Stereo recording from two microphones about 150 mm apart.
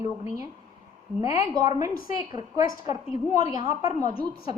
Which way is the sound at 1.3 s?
25° right (ahead or behind).